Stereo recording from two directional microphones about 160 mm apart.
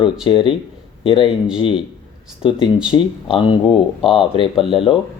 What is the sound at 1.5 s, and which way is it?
Speech, 30° left (ahead or behind).